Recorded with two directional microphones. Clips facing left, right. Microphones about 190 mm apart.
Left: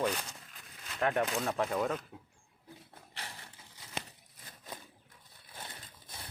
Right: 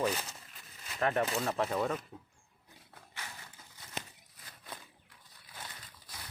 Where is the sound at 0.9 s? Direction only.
Centre (ahead or behind).